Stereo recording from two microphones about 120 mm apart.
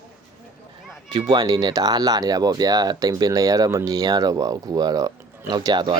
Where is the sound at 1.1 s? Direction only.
35° right (ahead or behind).